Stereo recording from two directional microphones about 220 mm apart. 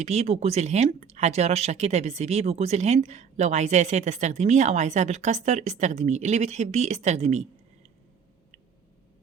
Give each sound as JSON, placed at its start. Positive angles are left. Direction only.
{"t": 0.0, "sound": "speech", "side_deg": -30}